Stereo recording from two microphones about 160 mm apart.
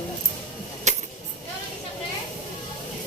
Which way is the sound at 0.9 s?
45° right (ahead or behind).